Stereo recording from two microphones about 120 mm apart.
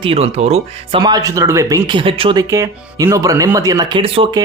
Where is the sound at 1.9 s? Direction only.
45° right (ahead or behind).